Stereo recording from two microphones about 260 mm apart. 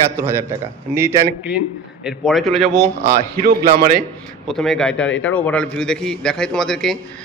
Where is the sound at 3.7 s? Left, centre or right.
Right.